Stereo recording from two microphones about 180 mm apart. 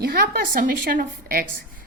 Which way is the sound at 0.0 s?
60° right (ahead or behind).